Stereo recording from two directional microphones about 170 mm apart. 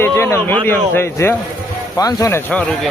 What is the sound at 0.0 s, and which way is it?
Speech, 15° left (ahead or behind).